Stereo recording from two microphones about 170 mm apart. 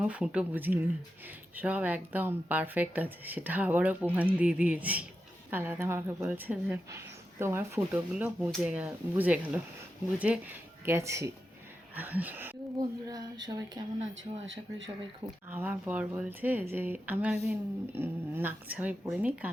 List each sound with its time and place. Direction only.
0.0 s speech: 5° right (ahead or behind)
12.8 s speech: 25° right (ahead or behind)
14.4 s speech: 90° right
15.4 s speech: 10° right (ahead or behind)